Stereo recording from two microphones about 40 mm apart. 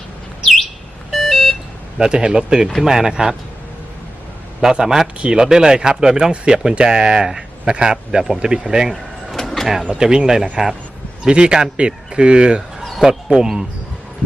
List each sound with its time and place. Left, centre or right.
1.1 s a sound: centre
2.0 s speech: right
4.6 s speech: centre
6.3 s speech: right
9.3 s vehicle: centre
9.9 s speech: centre
12.8 s a sound: centre
13.3 s speech: centre